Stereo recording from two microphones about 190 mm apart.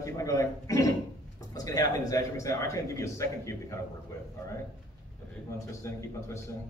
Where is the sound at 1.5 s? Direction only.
20° left (ahead or behind).